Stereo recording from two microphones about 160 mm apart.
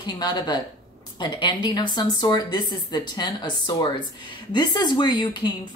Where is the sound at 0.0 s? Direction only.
25° left (ahead or behind).